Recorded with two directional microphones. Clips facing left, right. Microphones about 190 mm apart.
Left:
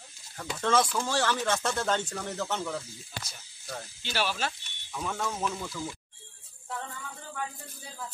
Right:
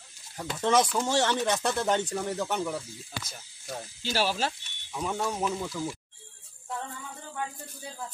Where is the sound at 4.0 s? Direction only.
40° right (ahead or behind).